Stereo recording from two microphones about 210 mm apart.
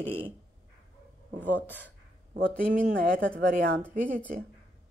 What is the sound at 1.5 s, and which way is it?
Speech, 10° left (ahead or behind).